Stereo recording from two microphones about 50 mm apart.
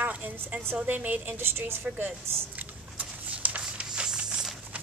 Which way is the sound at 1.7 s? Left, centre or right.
Right.